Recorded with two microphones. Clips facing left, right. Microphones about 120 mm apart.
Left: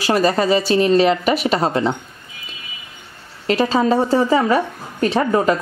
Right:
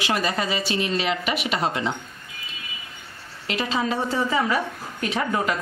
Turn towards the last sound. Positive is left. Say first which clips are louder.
# left 8 dB
turn(degrees=35)  # may be behind; listen again after turning